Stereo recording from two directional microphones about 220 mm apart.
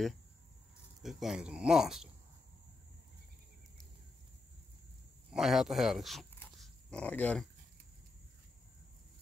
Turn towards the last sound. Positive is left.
turn(degrees=5)  # may be behind; listen again after turning